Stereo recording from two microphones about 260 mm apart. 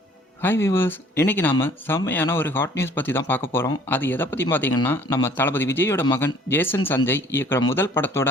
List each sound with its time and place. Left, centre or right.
0.4 s speech: centre